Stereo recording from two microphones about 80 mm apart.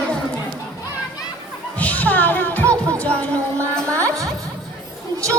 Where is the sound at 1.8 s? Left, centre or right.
Centre.